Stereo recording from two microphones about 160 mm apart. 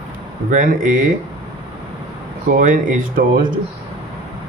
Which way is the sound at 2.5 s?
55° right (ahead or behind).